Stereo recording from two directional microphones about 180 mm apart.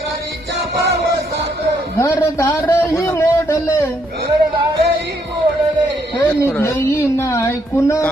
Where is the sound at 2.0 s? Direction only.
15° left (ahead or behind).